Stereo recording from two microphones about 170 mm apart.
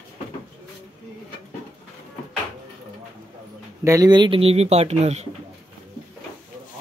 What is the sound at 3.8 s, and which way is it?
Speech, 20° right (ahead or behind).